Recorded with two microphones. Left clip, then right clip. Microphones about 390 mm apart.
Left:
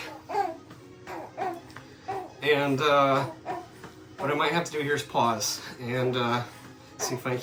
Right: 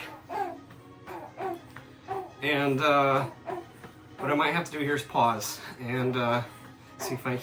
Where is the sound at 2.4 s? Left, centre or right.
Centre.